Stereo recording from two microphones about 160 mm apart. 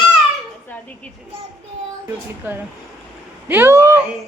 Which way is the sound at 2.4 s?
10° right (ahead or behind).